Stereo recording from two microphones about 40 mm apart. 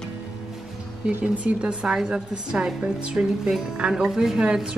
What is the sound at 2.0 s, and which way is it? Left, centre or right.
Speech, centre.